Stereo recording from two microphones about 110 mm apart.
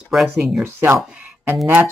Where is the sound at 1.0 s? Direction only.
10° right (ahead or behind).